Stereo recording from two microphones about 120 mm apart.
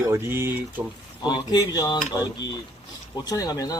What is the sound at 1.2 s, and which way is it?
Speech, 35° left (ahead or behind).